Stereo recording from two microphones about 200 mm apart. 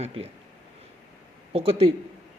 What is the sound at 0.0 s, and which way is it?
Speech, 30° right (ahead or behind).